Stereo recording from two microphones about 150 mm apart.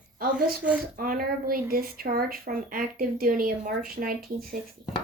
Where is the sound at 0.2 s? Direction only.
80° right.